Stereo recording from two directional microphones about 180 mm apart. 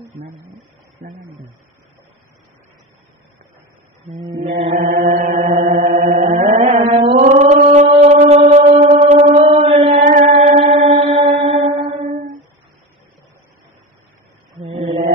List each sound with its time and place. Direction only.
0.1 s speech: 40° right (ahead or behind)
4.7 s chant: 50° right (ahead or behind)
7.2 s music: 40° right (ahead or behind)
10.6 s chant: 30° right (ahead or behind)
14.7 s mantra: 35° right (ahead or behind)